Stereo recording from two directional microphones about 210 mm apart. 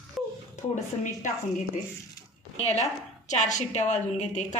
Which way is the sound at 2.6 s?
30° left (ahead or behind).